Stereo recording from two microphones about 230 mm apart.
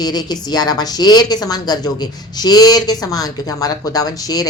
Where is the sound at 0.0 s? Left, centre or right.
Centre.